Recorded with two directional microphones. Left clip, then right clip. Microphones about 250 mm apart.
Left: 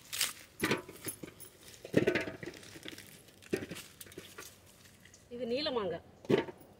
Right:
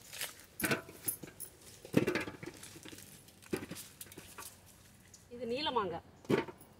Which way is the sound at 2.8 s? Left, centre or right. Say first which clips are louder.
Left 6 dB; left.